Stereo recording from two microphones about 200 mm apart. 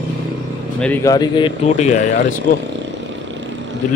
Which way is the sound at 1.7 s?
35° left (ahead or behind).